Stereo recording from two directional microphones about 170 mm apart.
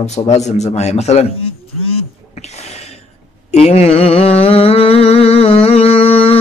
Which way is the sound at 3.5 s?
40° left (ahead or behind).